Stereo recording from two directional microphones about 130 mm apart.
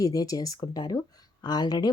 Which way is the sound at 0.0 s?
25° left (ahead or behind).